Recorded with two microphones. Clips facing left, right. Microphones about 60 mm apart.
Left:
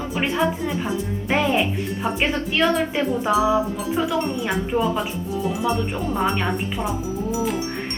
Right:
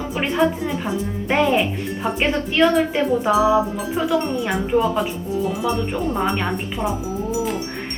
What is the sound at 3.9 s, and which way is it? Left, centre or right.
Speech, centre.